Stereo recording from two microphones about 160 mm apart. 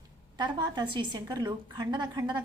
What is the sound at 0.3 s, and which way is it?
A woman's voice, 25° right (ahead or behind).